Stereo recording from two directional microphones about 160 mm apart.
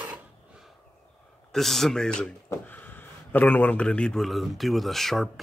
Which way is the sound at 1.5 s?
Centre (ahead or behind).